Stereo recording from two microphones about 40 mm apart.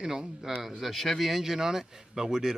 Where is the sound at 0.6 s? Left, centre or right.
Centre.